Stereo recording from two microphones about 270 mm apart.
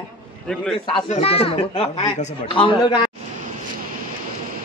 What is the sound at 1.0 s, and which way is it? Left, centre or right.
Speech, left.